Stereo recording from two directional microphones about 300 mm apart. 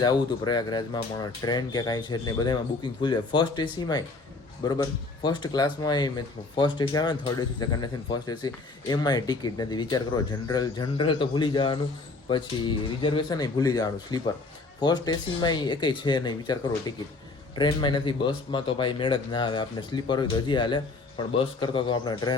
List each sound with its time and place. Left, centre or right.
0.0 s speech: centre